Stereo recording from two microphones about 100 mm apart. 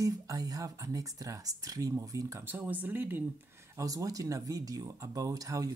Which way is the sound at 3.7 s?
35° right (ahead or behind).